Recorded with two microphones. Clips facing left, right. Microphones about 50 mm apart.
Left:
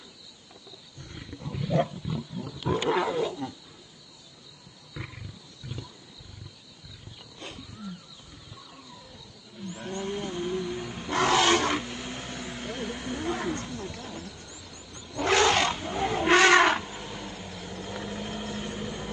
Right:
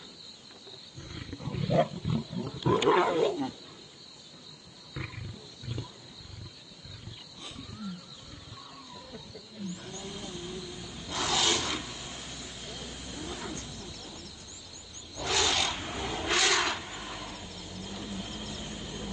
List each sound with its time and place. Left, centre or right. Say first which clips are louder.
1.0 s roaring cats: even; centre
4.9 s wild animals: even; centre
9.8 s vehicle: left 9 dB; left
15.1 s wild animals: left 7 dB; left